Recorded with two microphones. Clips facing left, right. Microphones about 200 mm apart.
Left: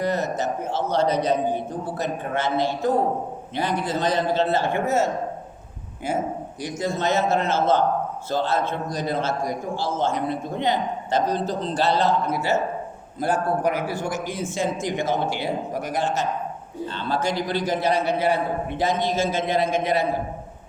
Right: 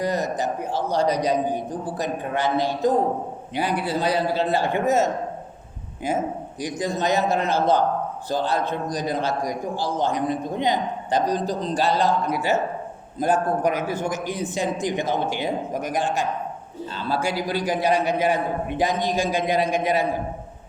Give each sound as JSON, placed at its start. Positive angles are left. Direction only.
{"t": 0.0, "sound": "a man's voice", "side_deg": -15}
{"t": 6.6, "sound": "a man's voice", "side_deg": -15}